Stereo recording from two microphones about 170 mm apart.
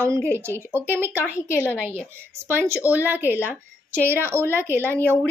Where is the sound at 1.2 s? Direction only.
15° left (ahead or behind).